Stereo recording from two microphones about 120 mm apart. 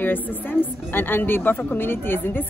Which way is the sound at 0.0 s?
15° left (ahead or behind).